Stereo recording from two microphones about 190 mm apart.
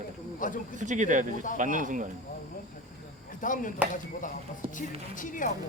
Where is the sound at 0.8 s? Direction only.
40° right (ahead or behind).